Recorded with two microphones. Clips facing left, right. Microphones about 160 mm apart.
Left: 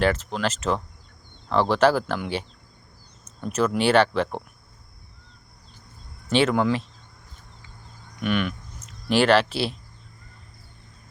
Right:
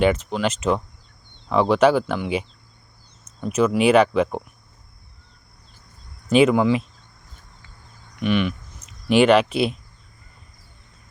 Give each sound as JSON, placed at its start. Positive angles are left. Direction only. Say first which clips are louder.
{"t": 0.0, "sound": "speech", "louder": "right 4 dB", "side_deg": -5}
{"t": 3.4, "sound": "speech", "louder": "right 4 dB", "side_deg": -5}
{"t": 6.5, "sound": "speech", "louder": "right 4 dB", "side_deg": -5}
{"t": 8.2, "sound": "cricket", "louder": "right 4 dB", "side_deg": 0}